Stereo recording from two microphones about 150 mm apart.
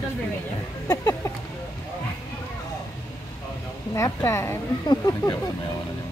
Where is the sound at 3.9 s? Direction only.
20° left (ahead or behind).